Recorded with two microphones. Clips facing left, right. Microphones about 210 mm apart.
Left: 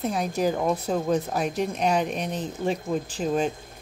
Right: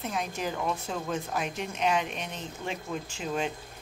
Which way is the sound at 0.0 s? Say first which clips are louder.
Left 8 dB; 35° left (ahead or behind).